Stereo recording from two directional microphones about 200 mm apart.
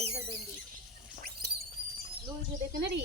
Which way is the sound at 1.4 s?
50° right (ahead or behind).